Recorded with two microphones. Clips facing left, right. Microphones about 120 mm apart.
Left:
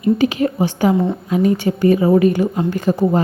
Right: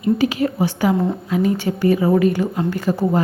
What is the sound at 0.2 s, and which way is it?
A woman's voice, 20° left (ahead or behind).